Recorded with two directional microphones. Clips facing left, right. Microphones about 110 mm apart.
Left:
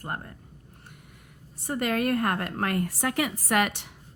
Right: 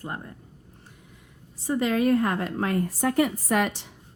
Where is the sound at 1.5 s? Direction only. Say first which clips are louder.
Right 3 dB; 55° left (ahead or behind).